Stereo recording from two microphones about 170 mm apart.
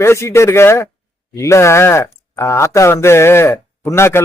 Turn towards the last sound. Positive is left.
turn(degrees=15)  # may be behind; listen again after turning